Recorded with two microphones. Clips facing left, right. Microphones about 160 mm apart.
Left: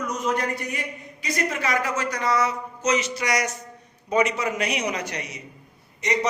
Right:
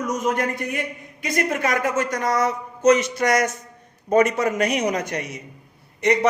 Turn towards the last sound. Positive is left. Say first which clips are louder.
# right 6 dB
turn(degrees=-60)  # may be behind; listen again after turning